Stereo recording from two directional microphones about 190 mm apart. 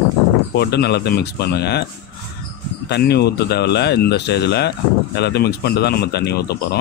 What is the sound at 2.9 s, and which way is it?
A man's voice, 60° left (ahead or behind).